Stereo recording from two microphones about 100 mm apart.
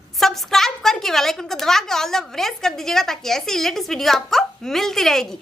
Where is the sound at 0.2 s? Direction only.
5° left (ahead or behind).